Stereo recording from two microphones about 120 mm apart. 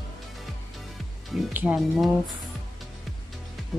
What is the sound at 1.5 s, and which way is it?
Speech, 10° right (ahead or behind).